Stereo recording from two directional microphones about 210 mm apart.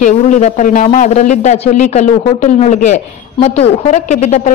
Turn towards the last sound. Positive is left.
turn(degrees=35)  # may be behind; listen again after turning